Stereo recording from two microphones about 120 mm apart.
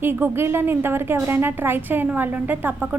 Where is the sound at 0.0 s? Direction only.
20° right (ahead or behind).